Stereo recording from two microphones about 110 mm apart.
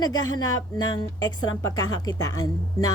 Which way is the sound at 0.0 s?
40° left (ahead or behind).